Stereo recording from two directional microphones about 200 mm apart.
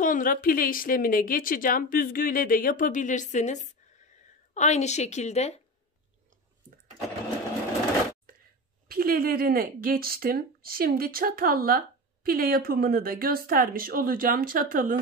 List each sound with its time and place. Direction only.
0.0 s a woman's voice: 45° left (ahead or behind)
8.3 s a sound: 45° right (ahead or behind)
8.8 s speech: 45° right (ahead or behind)